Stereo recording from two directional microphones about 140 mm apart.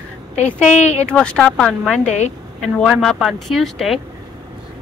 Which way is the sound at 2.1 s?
50° left (ahead or behind).